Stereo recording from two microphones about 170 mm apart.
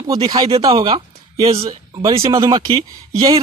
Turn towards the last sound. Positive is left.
turn(degrees=-25)  # may be behind; listen again after turning